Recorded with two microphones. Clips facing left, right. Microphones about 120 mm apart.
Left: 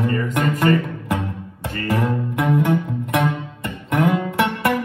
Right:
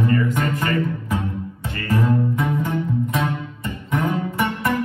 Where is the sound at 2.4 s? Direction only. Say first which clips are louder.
Left 4 dB; 70° left (ahead or behind).